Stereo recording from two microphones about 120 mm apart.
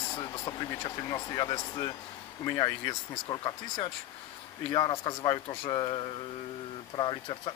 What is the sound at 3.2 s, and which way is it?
A man's voice, 45° left (ahead or behind).